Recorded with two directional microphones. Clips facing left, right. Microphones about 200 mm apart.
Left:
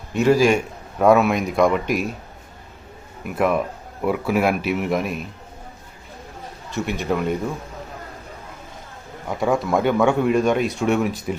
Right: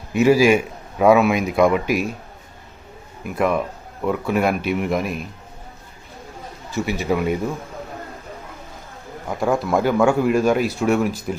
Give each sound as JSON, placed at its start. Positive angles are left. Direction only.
{"t": 0.1, "sound": "a man's voice", "side_deg": -5}
{"t": 3.2, "sound": "a man's voice", "side_deg": 0}
{"t": 6.7, "sound": "a man's voice", "side_deg": -5}
{"t": 9.2, "sound": "a man's voice", "side_deg": 0}